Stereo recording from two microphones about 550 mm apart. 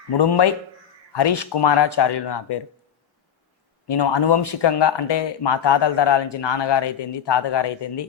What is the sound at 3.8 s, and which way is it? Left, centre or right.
Speech, left.